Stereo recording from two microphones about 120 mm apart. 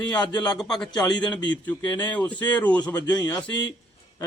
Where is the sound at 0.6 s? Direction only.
5° left (ahead or behind).